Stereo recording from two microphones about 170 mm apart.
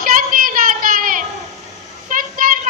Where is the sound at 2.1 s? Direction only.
55° right (ahead or behind).